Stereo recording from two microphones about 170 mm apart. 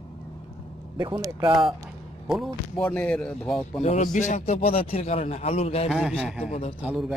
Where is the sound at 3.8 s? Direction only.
45° left (ahead or behind).